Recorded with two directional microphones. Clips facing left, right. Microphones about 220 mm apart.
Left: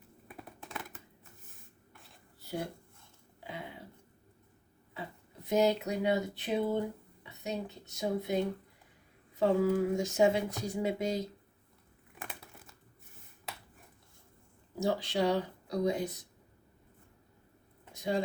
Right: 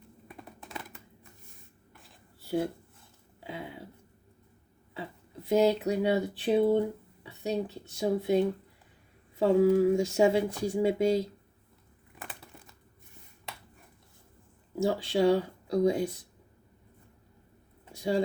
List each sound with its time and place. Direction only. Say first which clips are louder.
0.3 s computer keyboard: right 1 dB; centre (ahead or behind)
5.5 s speech: right 4 dB; 30° right (ahead or behind)
9.4 s speech: right 5 dB; 30° right (ahead or behind)
12.3 s crumpling: right 1 dB; 5° left (ahead or behind)
13.5 s a sound: right 1 dB; centre (ahead or behind)
14.8 s speech: right 4 dB; 25° right (ahead or behind)
17.9 s a sound: right 4 dB; 30° right (ahead or behind)